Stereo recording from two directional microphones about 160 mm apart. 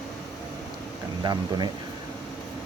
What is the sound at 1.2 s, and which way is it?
Speech, 25° right (ahead or behind).